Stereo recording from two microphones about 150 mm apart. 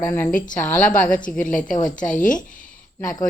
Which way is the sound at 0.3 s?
60° left (ahead or behind).